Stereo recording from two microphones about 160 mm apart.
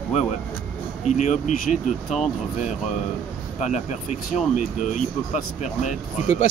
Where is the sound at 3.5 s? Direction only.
50° left (ahead or behind).